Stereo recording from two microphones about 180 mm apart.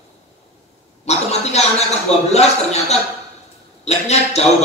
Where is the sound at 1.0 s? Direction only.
35° left (ahead or behind).